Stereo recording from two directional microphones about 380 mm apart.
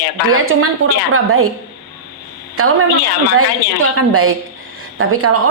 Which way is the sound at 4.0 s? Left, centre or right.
Right.